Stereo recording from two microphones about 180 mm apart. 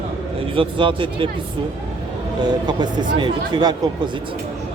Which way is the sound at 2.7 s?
25° right (ahead or behind).